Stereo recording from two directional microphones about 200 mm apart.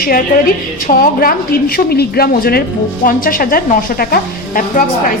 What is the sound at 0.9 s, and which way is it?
A woman's voice, 45° left (ahead or behind).